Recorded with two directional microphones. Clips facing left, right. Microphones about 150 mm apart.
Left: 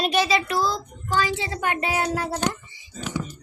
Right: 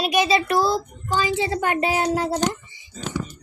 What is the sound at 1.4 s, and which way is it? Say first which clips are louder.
Speech: right 4 dB; 30° right (ahead or behind).